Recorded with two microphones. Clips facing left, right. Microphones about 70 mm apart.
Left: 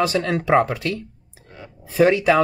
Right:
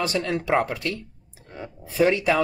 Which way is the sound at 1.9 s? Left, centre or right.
Left.